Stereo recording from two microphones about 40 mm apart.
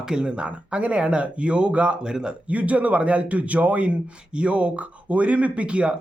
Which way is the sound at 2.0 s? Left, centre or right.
Right.